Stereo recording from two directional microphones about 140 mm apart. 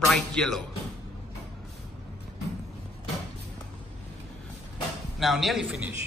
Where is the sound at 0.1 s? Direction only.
5° left (ahead or behind).